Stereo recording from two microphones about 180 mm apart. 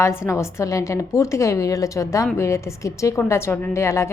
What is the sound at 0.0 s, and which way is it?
A woman's voice, 15° left (ahead or behind).